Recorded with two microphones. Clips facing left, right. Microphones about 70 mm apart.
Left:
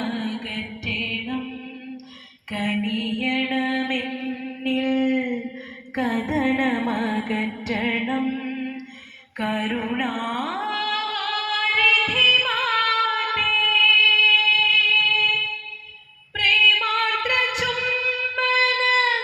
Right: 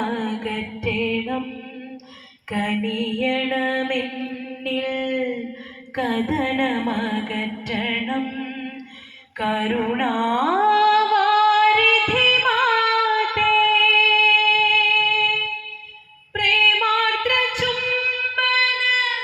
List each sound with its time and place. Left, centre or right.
0.0 s music: centre
2.5 s music: centre
2.7 s mantra: centre
3.5 s music: centre
3.8 s mantra: centre
4.0 s music: centre
9.4 s music: centre
17.2 s music: centre
18.4 s a sound: centre
18.9 s a sound: left